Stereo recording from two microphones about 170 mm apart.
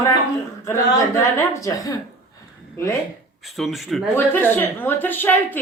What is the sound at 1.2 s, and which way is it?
Speech, 20° left (ahead or behind).